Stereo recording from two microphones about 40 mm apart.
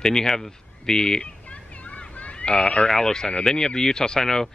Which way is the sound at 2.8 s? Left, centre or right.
Centre.